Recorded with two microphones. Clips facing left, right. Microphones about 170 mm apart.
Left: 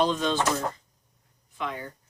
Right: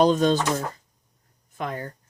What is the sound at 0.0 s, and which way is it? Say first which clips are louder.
Speech: right 5 dB; 40° right (ahead or behind).